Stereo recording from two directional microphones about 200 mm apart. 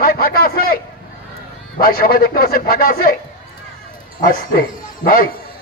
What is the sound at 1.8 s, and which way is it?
A man's voice, 45° left (ahead or behind).